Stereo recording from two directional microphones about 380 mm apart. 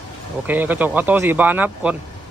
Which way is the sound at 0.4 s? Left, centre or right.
Centre.